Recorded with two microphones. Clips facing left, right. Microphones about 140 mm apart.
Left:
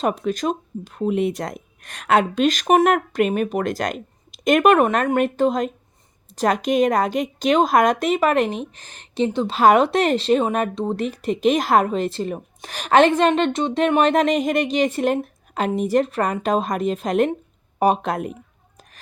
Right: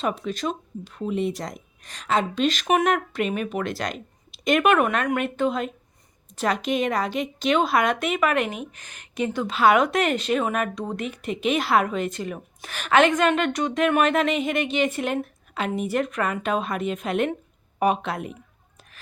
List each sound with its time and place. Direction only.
0.0 s speech: 45° left (ahead or behind); by 9.5 s 25° left (ahead or behind)
9.5 s speech: 35° left (ahead or behind)